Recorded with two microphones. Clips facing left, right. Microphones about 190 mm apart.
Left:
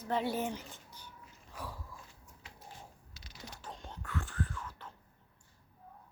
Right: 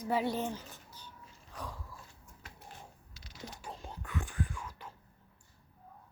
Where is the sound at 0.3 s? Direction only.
5° left (ahead or behind).